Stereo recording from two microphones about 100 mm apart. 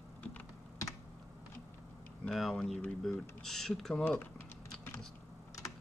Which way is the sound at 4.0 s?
20° left (ahead or behind).